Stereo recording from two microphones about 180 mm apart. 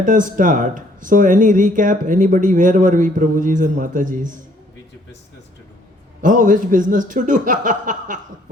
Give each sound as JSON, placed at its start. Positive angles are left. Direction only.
{"t": 0.0, "sound": "speech", "side_deg": -45}
{"t": 6.2, "sound": "speech", "side_deg": -45}